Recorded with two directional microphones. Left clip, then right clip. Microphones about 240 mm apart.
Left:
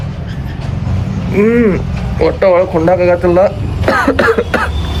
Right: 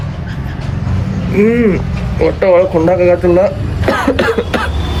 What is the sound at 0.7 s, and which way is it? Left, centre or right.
Vehicle, centre.